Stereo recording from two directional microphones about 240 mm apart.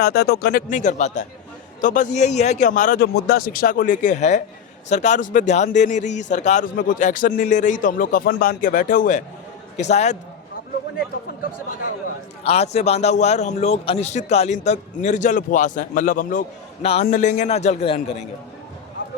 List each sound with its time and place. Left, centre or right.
0.0 s a man's voice: left
12.5 s a man's voice: left